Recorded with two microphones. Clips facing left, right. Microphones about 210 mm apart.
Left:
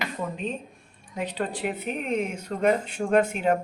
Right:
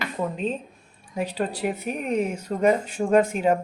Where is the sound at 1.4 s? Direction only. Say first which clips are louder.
Right 2 dB; 40° right (ahead or behind).